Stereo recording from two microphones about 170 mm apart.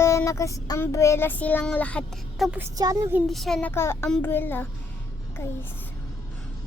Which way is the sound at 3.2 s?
Centre (ahead or behind).